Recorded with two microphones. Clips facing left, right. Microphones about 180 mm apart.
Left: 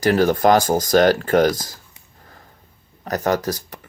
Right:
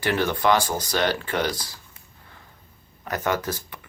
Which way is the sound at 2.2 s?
40° left (ahead or behind).